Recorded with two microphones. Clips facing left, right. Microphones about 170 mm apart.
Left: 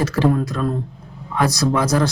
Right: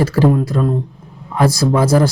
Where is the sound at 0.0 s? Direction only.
30° right (ahead or behind).